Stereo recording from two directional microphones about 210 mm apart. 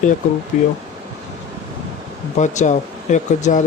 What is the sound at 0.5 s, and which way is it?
Speech, 40° left (ahead or behind).